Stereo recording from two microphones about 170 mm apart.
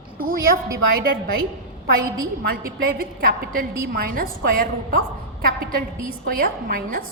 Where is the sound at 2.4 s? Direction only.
65° right (ahead or behind).